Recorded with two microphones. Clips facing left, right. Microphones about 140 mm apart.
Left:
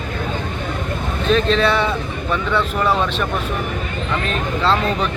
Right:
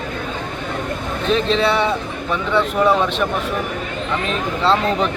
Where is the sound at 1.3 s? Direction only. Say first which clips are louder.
Left 1 dB; 20° right (ahead or behind).